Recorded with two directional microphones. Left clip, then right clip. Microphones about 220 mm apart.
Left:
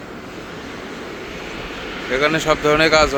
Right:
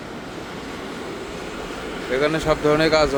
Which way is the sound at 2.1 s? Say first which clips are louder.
Left 3 dB; 5° right (ahead or behind).